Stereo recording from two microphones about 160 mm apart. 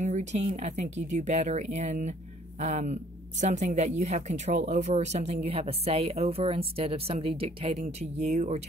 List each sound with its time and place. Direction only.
0.0 s speech: 45° right (ahead or behind)